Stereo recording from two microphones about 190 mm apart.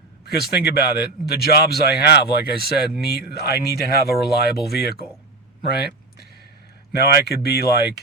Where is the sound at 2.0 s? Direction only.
60° left (ahead or behind).